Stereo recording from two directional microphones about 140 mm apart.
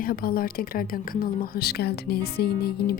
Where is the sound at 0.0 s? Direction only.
90° left.